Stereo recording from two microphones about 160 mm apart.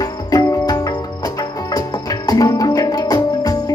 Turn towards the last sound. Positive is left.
turn(degrees=25)  # may be behind; listen again after turning